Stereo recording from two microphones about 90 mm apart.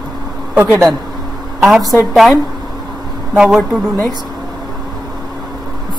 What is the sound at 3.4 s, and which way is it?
Speech, 10° right (ahead or behind).